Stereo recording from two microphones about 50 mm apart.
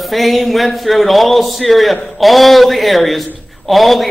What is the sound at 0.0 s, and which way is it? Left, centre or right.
A man's voice, centre.